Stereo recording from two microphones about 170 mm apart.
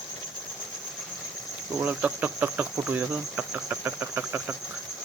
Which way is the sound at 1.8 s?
10° right (ahead or behind).